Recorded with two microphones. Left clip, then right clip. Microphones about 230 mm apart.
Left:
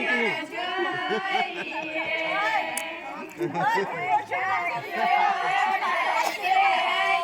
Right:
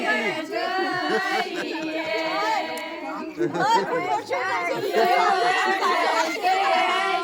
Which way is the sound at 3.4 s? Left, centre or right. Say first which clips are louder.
Right 4 dB; right.